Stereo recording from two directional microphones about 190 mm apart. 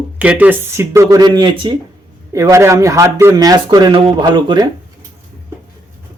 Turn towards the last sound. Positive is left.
turn(degrees=-25)  # may be behind; listen again after turning